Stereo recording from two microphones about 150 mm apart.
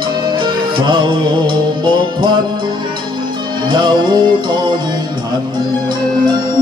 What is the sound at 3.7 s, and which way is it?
Music, 30° right (ahead or behind).